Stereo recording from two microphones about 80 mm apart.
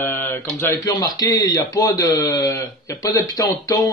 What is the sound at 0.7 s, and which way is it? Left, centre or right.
A man's voice, left.